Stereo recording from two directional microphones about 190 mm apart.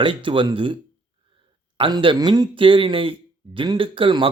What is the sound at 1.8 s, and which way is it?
Speech, 25° right (ahead or behind).